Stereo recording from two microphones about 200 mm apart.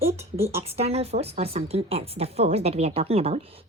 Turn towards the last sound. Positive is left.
turn(degrees=-30)  # may be behind; listen again after turning